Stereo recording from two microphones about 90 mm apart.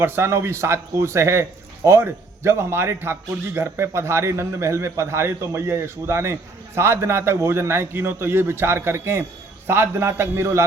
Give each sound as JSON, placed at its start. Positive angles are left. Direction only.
{"t": 0.0, "sound": "a man's voice", "side_deg": -30}